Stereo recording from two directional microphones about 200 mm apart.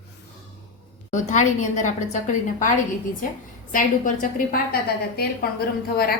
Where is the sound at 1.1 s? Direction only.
35° left (ahead or behind).